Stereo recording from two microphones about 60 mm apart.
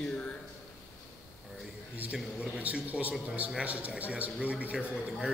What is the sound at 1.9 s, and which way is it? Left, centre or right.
A man's voice, right.